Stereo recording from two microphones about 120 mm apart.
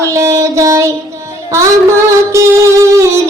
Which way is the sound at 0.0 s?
25° right (ahead or behind).